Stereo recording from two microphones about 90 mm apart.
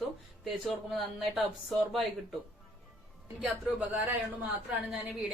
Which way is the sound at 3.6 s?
15° right (ahead or behind).